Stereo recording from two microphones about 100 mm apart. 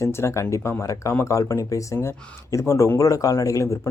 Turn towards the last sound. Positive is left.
turn(degrees=35)  # may be behind; listen again after turning